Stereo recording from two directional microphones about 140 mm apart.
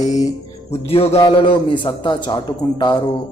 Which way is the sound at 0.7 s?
45° left (ahead or behind).